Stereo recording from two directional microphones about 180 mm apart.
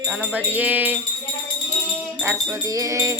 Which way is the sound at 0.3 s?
10° right (ahead or behind).